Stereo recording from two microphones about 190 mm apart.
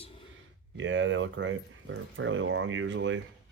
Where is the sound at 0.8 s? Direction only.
80° right.